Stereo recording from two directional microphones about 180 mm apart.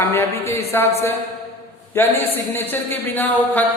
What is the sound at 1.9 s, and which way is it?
Speech, 10° left (ahead or behind).